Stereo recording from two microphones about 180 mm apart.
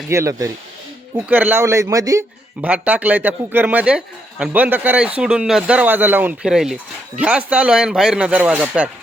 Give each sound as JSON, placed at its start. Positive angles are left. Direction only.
{"t": 0.1, "sound": "a man's voice", "side_deg": -15}